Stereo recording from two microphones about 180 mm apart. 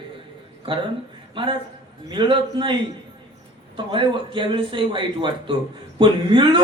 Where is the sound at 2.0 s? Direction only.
25° right (ahead or behind).